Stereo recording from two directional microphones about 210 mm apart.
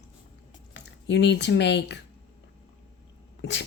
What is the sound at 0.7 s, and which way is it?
Speech, 55° left (ahead or behind).